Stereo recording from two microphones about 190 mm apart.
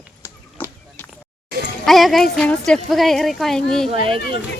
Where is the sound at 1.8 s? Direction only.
Centre (ahead or behind).